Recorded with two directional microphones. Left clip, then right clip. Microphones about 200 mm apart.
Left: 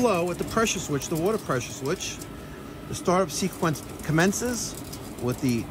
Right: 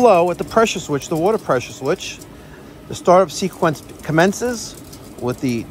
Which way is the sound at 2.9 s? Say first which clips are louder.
Right 11 dB; 10° left (ahead or behind).